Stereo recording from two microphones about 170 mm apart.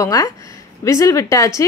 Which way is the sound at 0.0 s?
20° left (ahead or behind).